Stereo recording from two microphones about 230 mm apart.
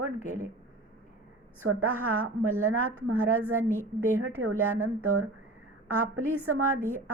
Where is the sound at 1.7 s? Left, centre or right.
Right.